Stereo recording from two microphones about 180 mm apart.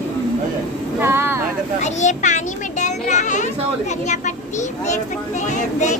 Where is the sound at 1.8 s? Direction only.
40° left (ahead or behind).